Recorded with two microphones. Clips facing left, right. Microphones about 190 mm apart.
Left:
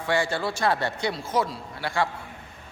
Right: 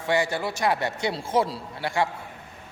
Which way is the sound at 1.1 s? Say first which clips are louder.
Right 2 dB; 30° right (ahead or behind).